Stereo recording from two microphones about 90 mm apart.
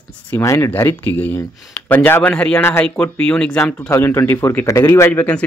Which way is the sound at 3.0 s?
15° left (ahead or behind).